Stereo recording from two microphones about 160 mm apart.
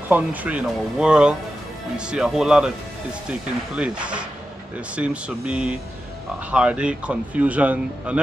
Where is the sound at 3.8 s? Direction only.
5° right (ahead or behind).